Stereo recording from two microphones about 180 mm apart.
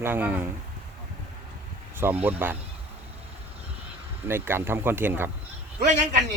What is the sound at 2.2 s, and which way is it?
Speech, 10° right (ahead or behind).